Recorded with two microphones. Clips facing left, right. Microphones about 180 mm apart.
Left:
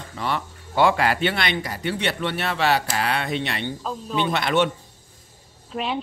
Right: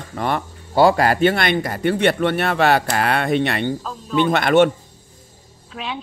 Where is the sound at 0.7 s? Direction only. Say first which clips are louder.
Right 5 dB; 40° right (ahead or behind).